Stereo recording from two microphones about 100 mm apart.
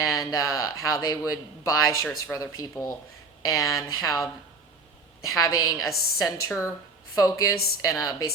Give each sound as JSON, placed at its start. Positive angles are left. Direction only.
{"t": 0.0, "sound": "speech", "side_deg": 35}
{"t": 5.3, "sound": "speech", "side_deg": 40}